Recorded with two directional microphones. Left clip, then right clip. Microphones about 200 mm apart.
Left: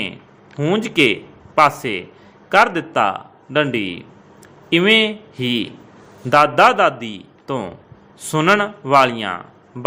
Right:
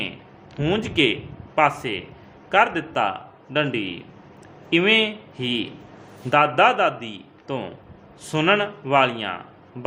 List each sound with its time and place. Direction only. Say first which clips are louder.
0.6 s a man's voice: left 5 dB; 25° left (ahead or behind)